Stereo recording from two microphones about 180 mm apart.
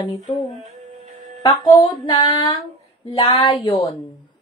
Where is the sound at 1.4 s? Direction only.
20° left (ahead or behind).